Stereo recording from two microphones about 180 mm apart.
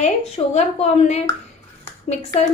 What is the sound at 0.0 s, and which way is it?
A woman's voice, 35° left (ahead or behind).